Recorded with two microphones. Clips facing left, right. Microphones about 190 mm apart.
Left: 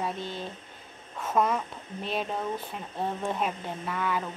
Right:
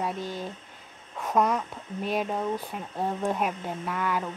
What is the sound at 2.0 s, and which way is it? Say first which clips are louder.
Speech: right 3 dB; 10° right (ahead or behind).